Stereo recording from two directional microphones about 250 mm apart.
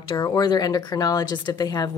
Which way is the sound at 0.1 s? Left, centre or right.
Centre.